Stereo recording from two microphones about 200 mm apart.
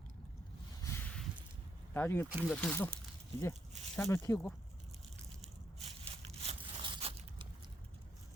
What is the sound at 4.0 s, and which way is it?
Speech, 15° left (ahead or behind).